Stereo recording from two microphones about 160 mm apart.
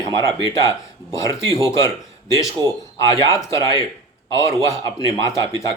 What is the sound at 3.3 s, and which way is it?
A man's voice, 20° left (ahead or behind).